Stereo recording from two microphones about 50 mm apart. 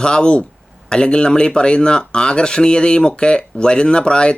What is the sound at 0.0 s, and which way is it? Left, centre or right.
Speech, centre.